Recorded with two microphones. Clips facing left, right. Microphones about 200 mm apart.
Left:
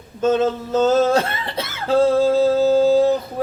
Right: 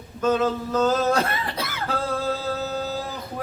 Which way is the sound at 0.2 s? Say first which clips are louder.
Left 4 dB; 25° left (ahead or behind).